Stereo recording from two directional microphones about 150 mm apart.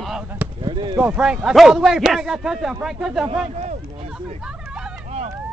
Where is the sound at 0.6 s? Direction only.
35° right (ahead or behind).